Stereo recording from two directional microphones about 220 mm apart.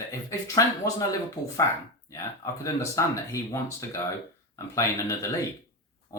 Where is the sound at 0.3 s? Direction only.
15° left (ahead or behind).